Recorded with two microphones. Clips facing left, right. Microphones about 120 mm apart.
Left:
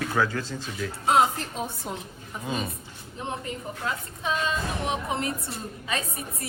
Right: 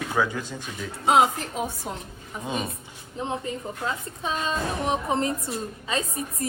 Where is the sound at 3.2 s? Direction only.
25° right (ahead or behind).